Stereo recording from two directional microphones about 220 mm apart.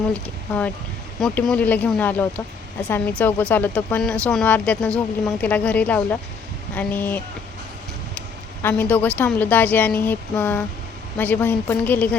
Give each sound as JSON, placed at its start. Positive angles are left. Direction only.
{"t": 0.1, "sound": "speech", "side_deg": 5}
{"t": 8.6, "sound": "speech", "side_deg": 10}